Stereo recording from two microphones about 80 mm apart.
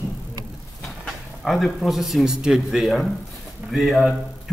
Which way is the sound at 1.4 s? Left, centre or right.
Centre.